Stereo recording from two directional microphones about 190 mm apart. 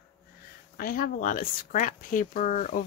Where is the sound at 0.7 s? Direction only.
50° left (ahead or behind).